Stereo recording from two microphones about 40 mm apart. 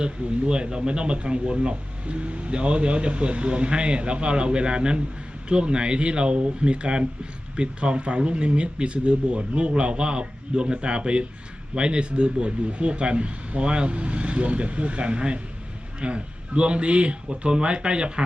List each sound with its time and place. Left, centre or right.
0.0 s a man's voice: right